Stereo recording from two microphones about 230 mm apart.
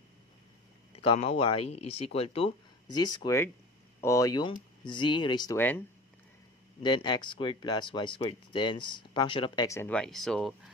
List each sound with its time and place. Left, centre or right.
0.9 s speech: left
6.8 s speech: centre